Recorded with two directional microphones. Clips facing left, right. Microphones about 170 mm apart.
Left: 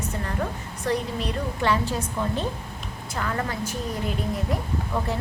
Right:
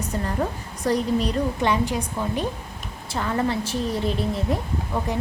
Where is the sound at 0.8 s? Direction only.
35° right (ahead or behind).